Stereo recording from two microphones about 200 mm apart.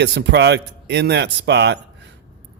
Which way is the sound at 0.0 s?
60° right (ahead or behind).